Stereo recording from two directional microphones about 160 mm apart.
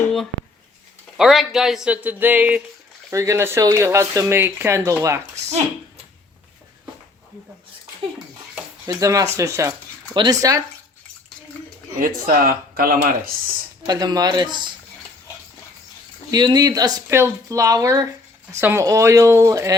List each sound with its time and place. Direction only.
1.1 s speech: centre (ahead or behind); by 5.2 s 15° right (ahead or behind)
8.9 s speech: 20° right (ahead or behind)
11.9 s speech: 60° right (ahead or behind)
13.8 s speech: 25° right (ahead or behind)
16.3 s speech: 25° right (ahead or behind)